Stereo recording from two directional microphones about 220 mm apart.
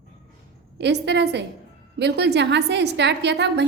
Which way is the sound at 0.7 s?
50° right (ahead or behind).